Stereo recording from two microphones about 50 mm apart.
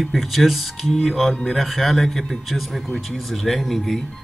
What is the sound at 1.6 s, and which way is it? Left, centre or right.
Speech, centre.